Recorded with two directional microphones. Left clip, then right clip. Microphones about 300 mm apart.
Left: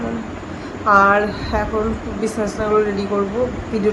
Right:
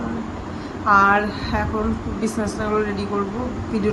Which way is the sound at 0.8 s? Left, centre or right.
Centre.